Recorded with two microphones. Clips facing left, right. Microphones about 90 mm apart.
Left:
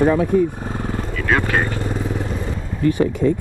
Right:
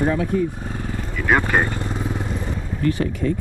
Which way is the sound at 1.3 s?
10° right (ahead or behind).